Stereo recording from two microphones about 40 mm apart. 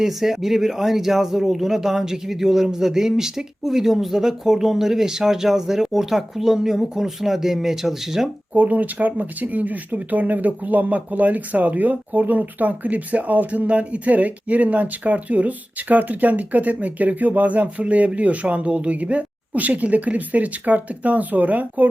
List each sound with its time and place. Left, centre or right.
0.0 s speech: centre
8.5 s speech: right